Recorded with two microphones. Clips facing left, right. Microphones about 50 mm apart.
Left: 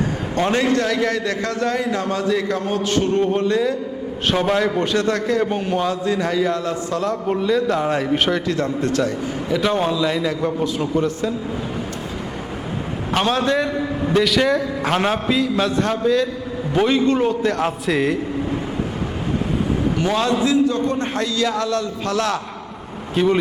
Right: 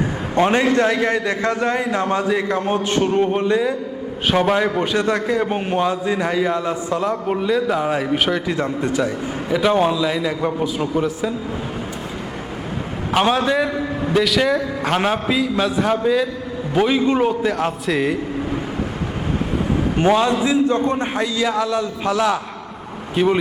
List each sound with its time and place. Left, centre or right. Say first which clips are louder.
0.3 s a man's voice: right 3 dB; right
5.5 s a man's voice: right 1 dB; right; by 8.4 s centre
8.4 s a man's voice: even; centre
10.4 s a man's voice: even; centre
13.1 s a man's voice: right 2 dB; centre
20.3 s a man's voice: even; right
21.0 s a man's voice: right 1 dB; centre